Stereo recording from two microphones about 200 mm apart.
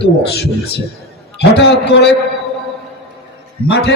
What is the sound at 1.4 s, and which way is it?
Speech, 60° left (ahead or behind).